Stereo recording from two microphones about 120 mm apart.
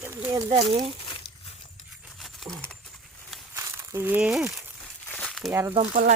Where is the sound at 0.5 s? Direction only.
50° right (ahead or behind).